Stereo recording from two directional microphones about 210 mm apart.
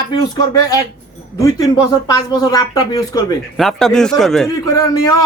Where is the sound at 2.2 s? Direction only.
20° left (ahead or behind).